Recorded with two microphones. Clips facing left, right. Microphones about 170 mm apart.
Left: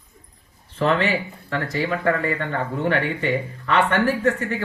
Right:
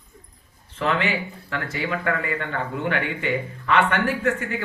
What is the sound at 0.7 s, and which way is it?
Speech, 35° left (ahead or behind).